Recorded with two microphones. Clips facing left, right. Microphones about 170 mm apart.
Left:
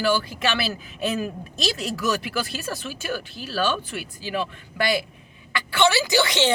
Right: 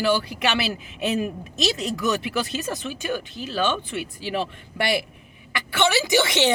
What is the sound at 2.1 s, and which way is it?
A woman's voice, 20° right (ahead or behind).